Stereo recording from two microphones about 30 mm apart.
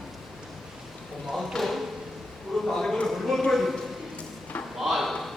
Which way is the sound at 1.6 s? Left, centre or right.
Left.